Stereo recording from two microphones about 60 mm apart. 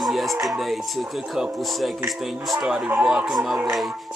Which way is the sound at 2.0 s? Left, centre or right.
Centre.